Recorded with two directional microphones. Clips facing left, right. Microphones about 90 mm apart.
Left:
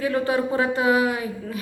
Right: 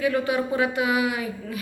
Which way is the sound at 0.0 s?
35° left (ahead or behind).